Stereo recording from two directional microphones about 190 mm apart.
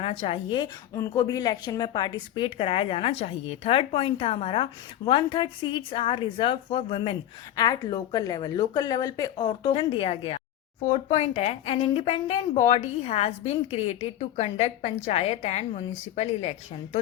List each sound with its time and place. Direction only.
0.0 s a woman's voice: 30° left (ahead or behind)